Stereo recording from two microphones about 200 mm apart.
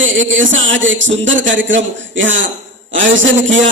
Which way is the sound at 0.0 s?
70° right (ahead or behind).